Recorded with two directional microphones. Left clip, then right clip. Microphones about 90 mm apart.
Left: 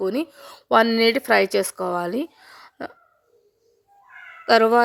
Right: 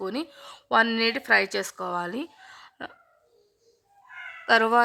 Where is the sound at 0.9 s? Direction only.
35° left (ahead or behind).